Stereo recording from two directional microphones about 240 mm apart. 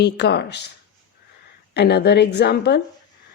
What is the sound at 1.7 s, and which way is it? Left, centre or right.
Speech, left.